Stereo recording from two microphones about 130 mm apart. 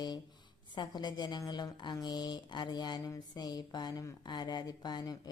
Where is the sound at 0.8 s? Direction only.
35° left (ahead or behind).